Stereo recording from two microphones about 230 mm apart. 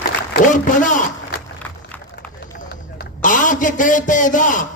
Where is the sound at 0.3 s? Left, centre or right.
Left.